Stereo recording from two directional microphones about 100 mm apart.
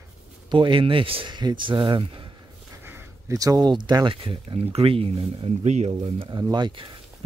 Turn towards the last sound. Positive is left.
turn(degrees=-45)  # may be behind; listen again after turning